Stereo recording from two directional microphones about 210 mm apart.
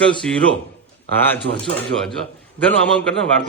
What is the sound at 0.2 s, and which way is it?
Speech, 5° left (ahead or behind).